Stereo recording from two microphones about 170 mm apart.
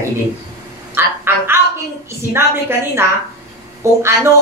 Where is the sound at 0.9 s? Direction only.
15° right (ahead or behind).